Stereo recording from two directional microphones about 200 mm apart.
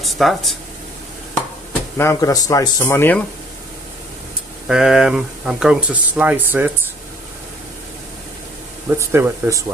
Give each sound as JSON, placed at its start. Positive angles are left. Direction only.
{"t": 0.0, "sound": "speech", "side_deg": 0}
{"t": 2.0, "sound": "speech", "side_deg": 15}
{"t": 4.7, "sound": "speech", "side_deg": -5}
{"t": 9.0, "sound": "speech", "side_deg": -15}